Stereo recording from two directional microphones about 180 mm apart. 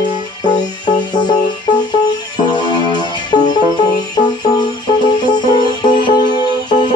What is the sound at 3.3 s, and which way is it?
Music, 25° left (ahead or behind).